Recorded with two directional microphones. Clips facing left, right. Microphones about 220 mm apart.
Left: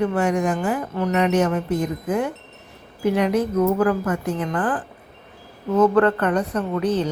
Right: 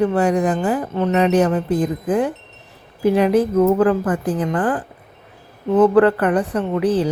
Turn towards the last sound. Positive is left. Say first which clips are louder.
# right 4 dB
turn(degrees=-30)  # may be behind; listen again after turning